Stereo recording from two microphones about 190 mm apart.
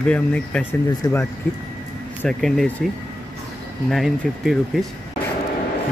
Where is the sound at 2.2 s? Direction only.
Centre (ahead or behind).